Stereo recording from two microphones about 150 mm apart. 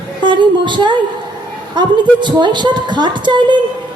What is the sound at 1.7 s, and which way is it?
A woman's voice, 30° right (ahead or behind).